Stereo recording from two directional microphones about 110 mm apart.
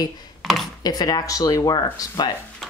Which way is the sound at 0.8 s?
35° left (ahead or behind).